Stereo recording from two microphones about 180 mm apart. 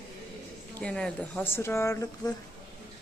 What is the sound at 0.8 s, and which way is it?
Speech, 5° left (ahead or behind).